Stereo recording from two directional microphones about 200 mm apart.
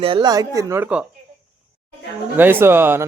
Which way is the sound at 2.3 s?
10° right (ahead or behind).